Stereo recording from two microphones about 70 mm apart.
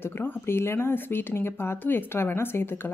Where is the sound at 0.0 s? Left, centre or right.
Left.